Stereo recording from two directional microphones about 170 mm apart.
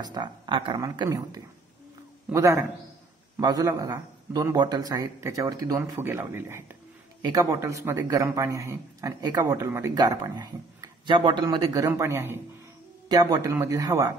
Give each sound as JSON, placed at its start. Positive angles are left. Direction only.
{"t": 0.0, "sound": "a man's voice", "side_deg": -25}